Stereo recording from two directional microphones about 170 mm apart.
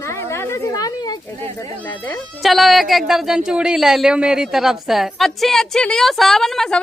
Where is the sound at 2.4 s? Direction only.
Centre (ahead or behind).